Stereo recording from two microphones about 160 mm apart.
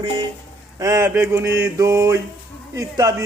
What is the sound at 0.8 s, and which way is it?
Mantra, 20° right (ahead or behind).